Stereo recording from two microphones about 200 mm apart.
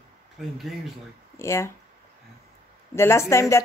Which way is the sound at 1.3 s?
15° left (ahead or behind).